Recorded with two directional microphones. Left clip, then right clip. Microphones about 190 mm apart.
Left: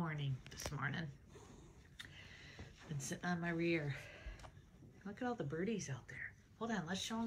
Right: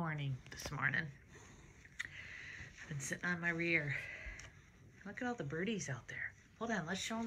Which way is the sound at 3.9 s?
Centre (ahead or behind).